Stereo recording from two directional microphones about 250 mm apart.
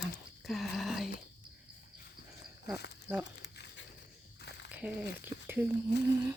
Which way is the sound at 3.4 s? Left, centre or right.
Left.